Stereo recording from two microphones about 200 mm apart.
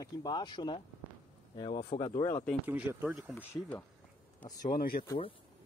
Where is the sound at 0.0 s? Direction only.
20° left (ahead or behind).